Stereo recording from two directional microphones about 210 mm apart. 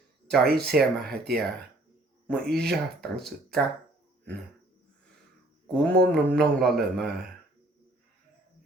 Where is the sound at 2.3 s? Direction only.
5° left (ahead or behind).